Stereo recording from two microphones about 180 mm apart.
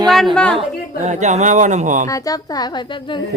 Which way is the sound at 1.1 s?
40° right (ahead or behind).